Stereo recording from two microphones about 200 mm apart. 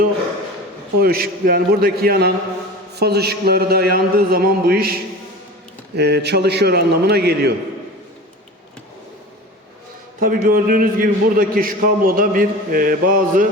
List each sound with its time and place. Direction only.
0.9 s a man's voice: 50° right (ahead or behind)
6.0 s a man's voice: 55° right (ahead or behind)
10.2 s a man's voice: 45° right (ahead or behind)